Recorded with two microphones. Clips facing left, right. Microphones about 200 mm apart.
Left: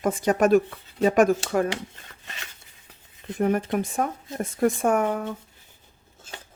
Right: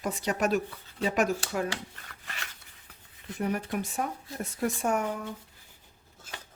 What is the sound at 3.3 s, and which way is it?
Speech, 50° left (ahead or behind).